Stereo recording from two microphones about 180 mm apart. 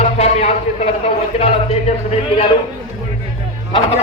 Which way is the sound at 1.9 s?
35° left (ahead or behind).